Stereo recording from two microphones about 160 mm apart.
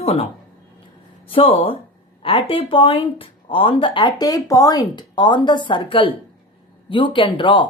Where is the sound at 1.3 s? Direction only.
35° left (ahead or behind).